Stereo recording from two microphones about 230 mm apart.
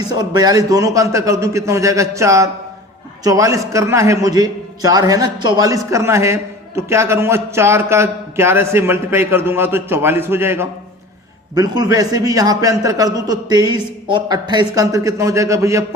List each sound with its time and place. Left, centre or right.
0.1 s a man's voice: centre